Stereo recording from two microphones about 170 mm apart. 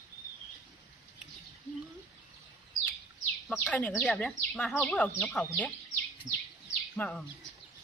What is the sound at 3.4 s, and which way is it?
Speech, 5° left (ahead or behind).